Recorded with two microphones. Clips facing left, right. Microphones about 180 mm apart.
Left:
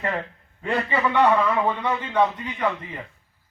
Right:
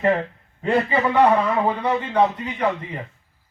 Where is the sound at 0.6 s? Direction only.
20° right (ahead or behind).